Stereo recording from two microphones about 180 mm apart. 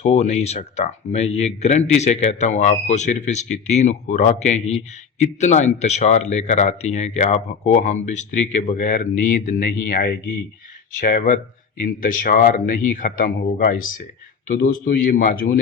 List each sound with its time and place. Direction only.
0.0 s speech: 40° left (ahead or behind)